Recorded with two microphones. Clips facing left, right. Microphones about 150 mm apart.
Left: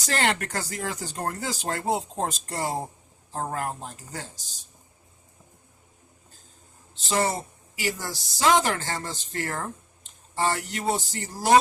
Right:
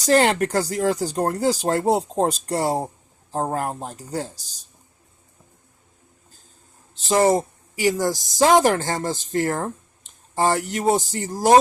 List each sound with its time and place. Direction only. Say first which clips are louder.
0.0 s speech: right 9 dB; 40° right (ahead or behind)
7.1 s speech: right 8 dB; 40° right (ahead or behind)